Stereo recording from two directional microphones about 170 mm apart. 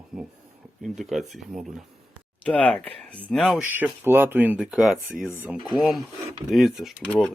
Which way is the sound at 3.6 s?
10° right (ahead or behind).